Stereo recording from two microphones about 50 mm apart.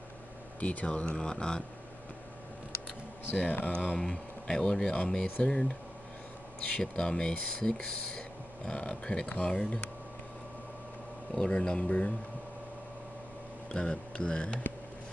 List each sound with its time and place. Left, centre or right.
0.6 s speech: left
1.1 s speech: centre
3.4 s speech: left
6.8 s speech: centre
11.3 s speech: centre
13.7 s speech: centre